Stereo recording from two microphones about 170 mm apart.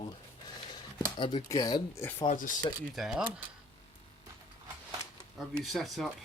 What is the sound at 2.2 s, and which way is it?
Speech, 50° left (ahead or behind).